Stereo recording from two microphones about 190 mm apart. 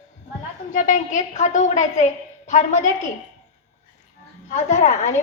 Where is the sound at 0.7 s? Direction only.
40° left (ahead or behind).